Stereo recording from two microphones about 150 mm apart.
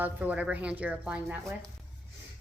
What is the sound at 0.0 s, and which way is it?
A woman's voice, 10° right (ahead or behind).